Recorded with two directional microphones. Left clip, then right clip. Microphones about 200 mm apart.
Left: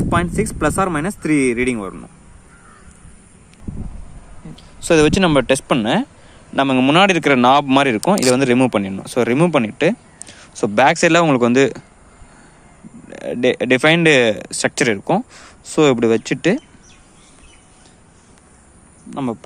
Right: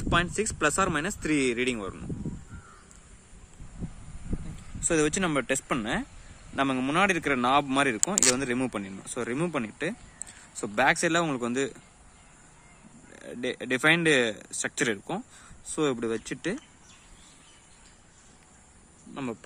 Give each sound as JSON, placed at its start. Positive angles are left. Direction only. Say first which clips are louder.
{"t": 0.1, "sound": "speech", "louder": "left 5 dB", "side_deg": 30}
{"t": 4.8, "sound": "speech", "louder": "left 13 dB", "side_deg": 30}
{"t": 13.1, "sound": "speech", "louder": "left 16 dB", "side_deg": 30}